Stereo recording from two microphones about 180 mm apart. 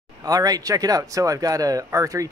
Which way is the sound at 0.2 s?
20° right (ahead or behind).